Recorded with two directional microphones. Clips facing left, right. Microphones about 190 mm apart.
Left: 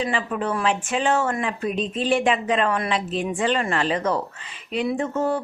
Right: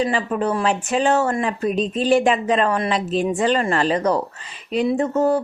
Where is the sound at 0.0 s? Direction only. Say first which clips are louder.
Right 4 dB; 40° right (ahead or behind).